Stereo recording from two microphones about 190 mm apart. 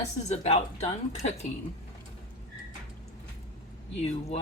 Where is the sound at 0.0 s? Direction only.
35° left (ahead or behind).